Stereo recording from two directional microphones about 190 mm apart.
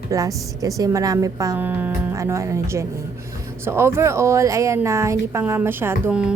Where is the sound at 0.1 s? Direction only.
15° right (ahead or behind).